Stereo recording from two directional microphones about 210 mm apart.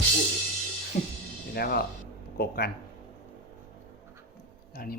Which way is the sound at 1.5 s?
45° left (ahead or behind).